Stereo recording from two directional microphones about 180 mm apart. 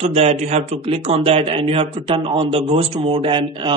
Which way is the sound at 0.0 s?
35° right (ahead or behind).